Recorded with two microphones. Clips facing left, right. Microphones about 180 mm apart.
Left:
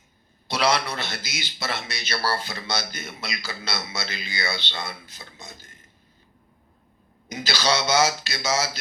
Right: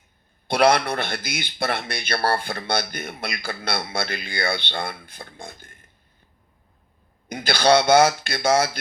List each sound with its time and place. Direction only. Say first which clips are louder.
0.4 s a man's voice: right 5 dB; 55° right (ahead or behind)
7.3 s a man's voice: right 7 dB; 55° right (ahead or behind)